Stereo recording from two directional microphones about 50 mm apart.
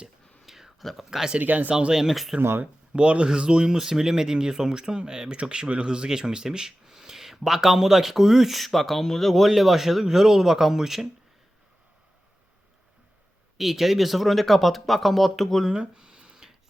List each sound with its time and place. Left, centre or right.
0.4 s whispering: centre
0.8 s speech: centre
1.4 s speech: right
1.7 s speech: centre
2.9 s speech: right
13.6 s speech: centre
15.7 s a sound: centre